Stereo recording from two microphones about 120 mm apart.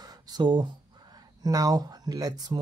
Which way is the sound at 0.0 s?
35° right (ahead or behind).